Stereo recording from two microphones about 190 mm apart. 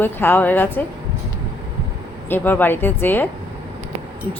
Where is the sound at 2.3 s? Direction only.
10° left (ahead or behind).